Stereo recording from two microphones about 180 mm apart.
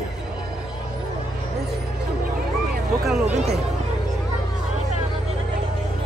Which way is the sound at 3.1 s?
5° right (ahead or behind).